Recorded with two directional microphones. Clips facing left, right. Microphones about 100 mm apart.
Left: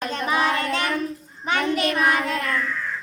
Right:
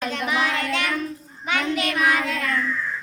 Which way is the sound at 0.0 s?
35° left (ahead or behind).